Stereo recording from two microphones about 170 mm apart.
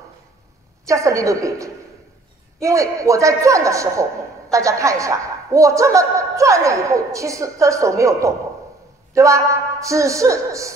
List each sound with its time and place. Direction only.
0.8 s a man's voice: 20° right (ahead or behind)